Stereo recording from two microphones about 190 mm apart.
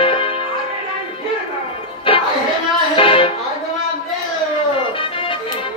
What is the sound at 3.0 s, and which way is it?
Music, 30° left (ahead or behind).